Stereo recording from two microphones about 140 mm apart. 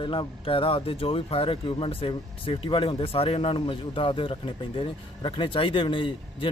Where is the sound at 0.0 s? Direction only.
40° left (ahead or behind).